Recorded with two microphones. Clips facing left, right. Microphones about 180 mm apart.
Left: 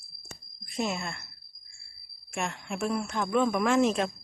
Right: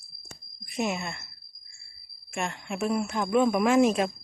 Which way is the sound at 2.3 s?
Centre (ahead or behind).